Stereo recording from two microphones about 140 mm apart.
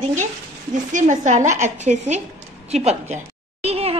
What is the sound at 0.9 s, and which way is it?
A woman's voice, 60° right (ahead or behind).